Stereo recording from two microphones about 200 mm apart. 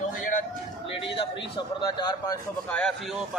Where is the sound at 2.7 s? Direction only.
5° left (ahead or behind).